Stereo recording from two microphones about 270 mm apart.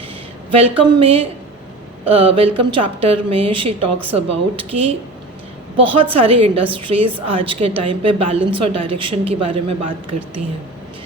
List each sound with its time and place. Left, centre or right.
0.6 s a woman's voice: centre